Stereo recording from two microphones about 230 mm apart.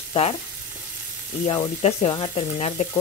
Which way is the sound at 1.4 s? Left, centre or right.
Left.